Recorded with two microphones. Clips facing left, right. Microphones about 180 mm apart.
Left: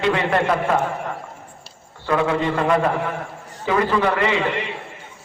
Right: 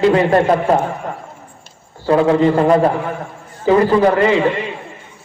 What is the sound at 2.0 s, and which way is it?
A man's voice, 35° right (ahead or behind).